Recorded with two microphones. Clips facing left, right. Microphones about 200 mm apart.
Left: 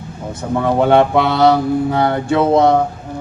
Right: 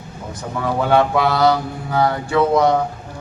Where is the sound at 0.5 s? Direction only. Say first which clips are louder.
Left 5 dB; 25° left (ahead or behind).